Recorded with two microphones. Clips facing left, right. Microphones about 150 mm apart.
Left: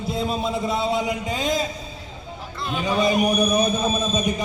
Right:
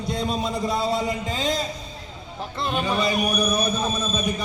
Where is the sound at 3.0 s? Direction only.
20° left (ahead or behind).